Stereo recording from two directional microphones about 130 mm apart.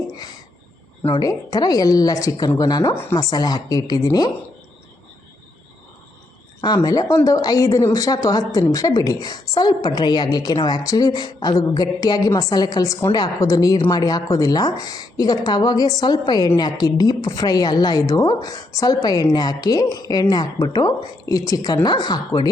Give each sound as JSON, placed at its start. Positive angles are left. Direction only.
{"t": 1.2, "sound": "a woman's voice", "side_deg": 30}
{"t": 2.9, "sound": "a woman's voice", "side_deg": 20}
{"t": 6.7, "sound": "a woman's voice", "side_deg": 30}